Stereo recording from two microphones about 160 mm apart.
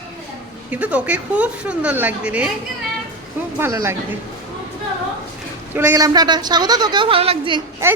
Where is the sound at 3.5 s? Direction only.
15° right (ahead or behind).